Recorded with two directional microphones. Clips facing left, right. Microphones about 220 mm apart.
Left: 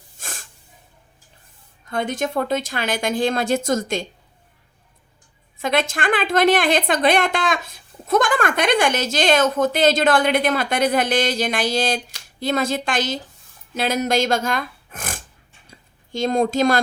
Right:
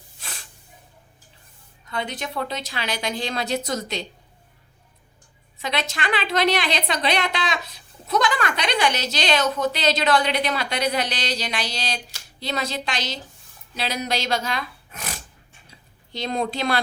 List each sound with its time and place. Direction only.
0.2 s snort: 45° left (ahead or behind)
1.9 s a woman's voice: 50° left (ahead or behind)
5.5 s a woman's voice: 50° left (ahead or behind)